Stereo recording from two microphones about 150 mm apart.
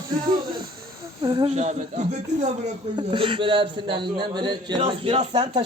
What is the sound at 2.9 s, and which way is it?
A man's voice, 35° right (ahead or behind).